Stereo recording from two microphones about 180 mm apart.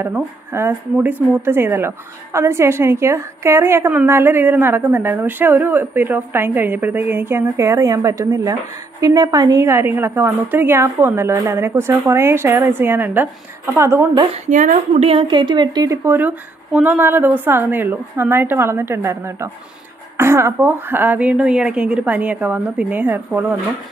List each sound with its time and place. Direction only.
0.0 s speech: 15° right (ahead or behind)
14.3 s a woman's voice: 45° right (ahead or behind)
15.0 s speech: 25° right (ahead or behind); by 23.4 s 10° right (ahead or behind)